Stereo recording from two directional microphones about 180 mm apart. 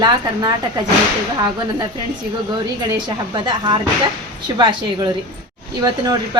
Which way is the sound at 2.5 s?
25° right (ahead or behind).